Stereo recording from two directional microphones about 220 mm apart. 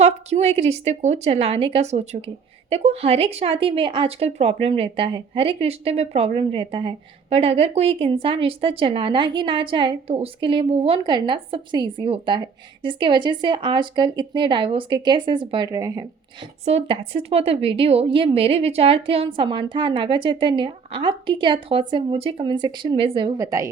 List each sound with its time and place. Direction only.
0.0 s speech: 30° right (ahead or behind)
16.6 s speech: 25° right (ahead or behind)